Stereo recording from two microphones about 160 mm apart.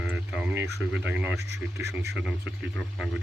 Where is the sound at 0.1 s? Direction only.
10° right (ahead or behind).